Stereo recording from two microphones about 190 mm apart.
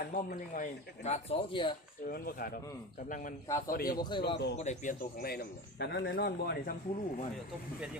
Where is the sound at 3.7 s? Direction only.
50° left (ahead or behind).